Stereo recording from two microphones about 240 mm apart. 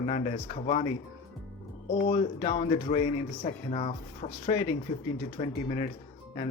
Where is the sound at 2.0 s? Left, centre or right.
Left.